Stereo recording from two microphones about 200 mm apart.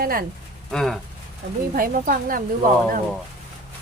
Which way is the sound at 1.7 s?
45° right (ahead or behind).